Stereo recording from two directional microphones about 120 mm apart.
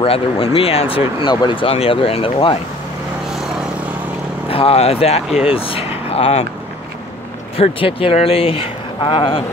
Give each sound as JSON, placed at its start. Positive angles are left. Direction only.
{"t": 0.0, "sound": "speech", "side_deg": 55}
{"t": 4.5, "sound": "speech", "side_deg": 50}
{"t": 5.3, "sound": "speech", "side_deg": -5}
{"t": 5.6, "sound": "speech", "side_deg": 55}
{"t": 7.5, "sound": "speech", "side_deg": 50}